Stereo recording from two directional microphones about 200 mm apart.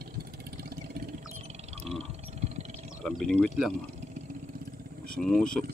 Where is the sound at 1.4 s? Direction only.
35° right (ahead or behind).